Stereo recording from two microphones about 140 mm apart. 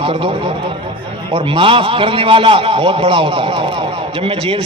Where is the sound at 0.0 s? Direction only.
40° right (ahead or behind).